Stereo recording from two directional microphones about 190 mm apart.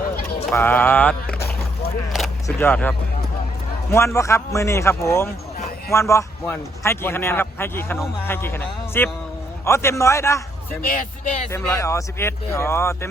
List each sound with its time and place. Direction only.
0.5 s a man's voice: 10° left (ahead or behind)
2.6 s a man's voice: 10° left (ahead or behind)
3.9 s a man's voice: 15° left (ahead or behind)
10.8 s speech: 45° left (ahead or behind)
11.5 s a man's voice: 15° left (ahead or behind)